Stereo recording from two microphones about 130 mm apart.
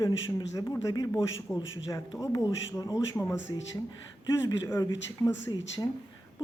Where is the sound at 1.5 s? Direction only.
10° left (ahead or behind).